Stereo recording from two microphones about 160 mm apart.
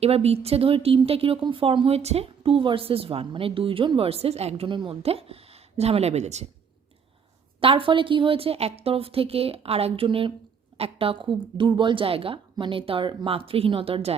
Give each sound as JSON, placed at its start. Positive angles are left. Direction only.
{"t": 0.0, "sound": "a woman's voice", "side_deg": -40}
{"t": 7.6, "sound": "a woman's voice", "side_deg": -35}